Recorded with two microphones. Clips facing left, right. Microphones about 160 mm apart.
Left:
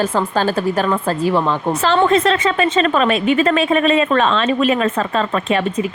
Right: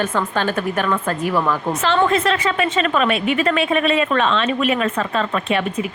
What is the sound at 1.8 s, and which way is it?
A woman's voice, 35° left (ahead or behind).